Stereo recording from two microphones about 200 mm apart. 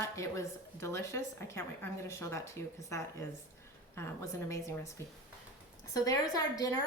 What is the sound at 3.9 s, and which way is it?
Speech, 15° left (ahead or behind).